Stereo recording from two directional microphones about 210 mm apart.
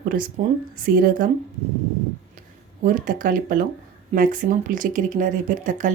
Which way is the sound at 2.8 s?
40° right (ahead or behind).